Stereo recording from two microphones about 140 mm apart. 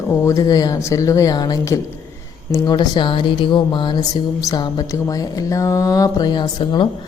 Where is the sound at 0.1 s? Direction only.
20° left (ahead or behind).